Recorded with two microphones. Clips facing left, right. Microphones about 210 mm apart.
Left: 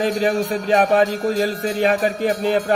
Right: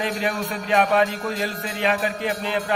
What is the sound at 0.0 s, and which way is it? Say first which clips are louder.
Music: left 6 dB; 40° left (ahead or behind).